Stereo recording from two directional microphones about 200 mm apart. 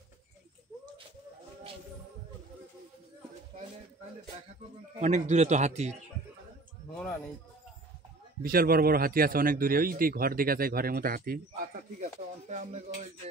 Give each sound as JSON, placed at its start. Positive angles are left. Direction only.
{"t": 5.0, "sound": "speech", "side_deg": -35}
{"t": 7.0, "sound": "speech", "side_deg": 5}
{"t": 8.4, "sound": "speech", "side_deg": -45}